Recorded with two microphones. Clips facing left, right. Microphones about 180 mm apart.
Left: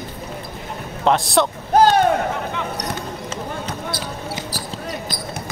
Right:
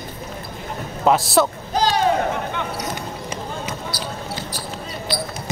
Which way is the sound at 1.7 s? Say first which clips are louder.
Left 6 dB; 55° left (ahead or behind).